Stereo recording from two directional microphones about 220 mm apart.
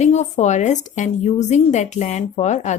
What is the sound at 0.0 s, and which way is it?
A woman's voice, 30° left (ahead or behind).